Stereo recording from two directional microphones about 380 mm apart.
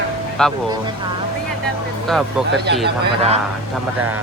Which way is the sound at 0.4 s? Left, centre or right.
Centre.